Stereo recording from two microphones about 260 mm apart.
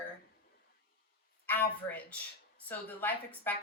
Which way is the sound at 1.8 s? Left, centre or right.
Centre.